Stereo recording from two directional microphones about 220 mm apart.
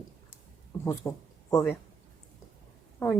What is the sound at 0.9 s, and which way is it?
Speech, 10° left (ahead or behind).